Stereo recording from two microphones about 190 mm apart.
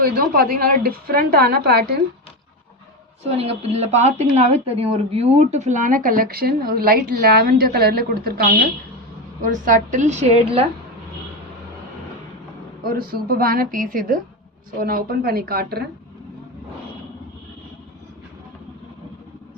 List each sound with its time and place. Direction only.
0.0 s speech: 50° right (ahead or behind)
3.3 s a woman's voice: 35° right (ahead or behind)
12.8 s speech: 50° right (ahead or behind)